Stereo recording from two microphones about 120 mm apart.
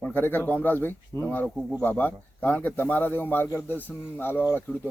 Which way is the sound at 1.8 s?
15° left (ahead or behind).